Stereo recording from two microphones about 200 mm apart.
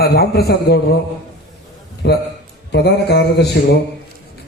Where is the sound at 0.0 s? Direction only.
50° left (ahead or behind).